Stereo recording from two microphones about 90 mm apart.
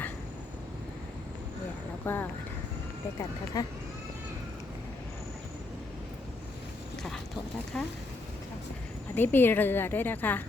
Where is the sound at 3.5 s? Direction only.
45° left (ahead or behind).